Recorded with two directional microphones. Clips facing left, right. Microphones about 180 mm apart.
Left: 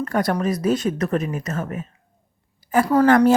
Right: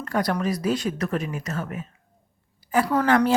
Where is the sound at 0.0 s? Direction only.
50° left (ahead or behind).